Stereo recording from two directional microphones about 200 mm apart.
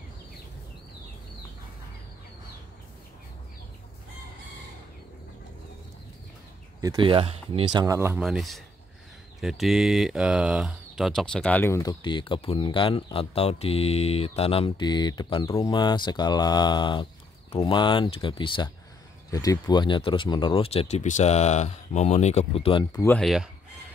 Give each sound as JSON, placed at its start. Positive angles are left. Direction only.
{"t": 6.8, "sound": "speech", "side_deg": -20}
{"t": 7.8, "sound": "speech", "side_deg": -15}
{"t": 22.9, "sound": "speech", "side_deg": 5}